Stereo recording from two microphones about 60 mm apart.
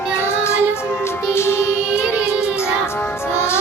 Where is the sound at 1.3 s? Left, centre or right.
Left.